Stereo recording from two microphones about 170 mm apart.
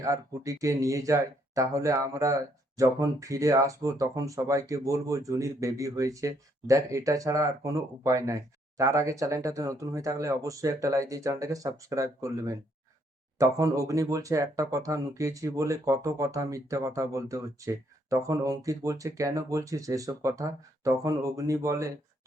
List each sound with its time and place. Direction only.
0.0 s speech: 20° right (ahead or behind)
13.6 s speech: 20° right (ahead or behind)